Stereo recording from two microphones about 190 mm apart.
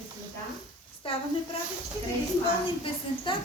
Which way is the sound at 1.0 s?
30° left (ahead or behind).